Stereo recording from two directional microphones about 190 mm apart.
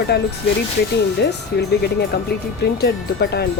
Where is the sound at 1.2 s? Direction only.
60° left (ahead or behind).